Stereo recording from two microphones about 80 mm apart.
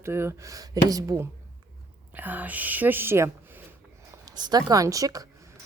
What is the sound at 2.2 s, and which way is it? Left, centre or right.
Speech, right.